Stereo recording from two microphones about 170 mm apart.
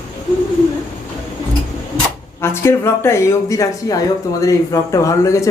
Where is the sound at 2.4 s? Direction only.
15° left (ahead or behind).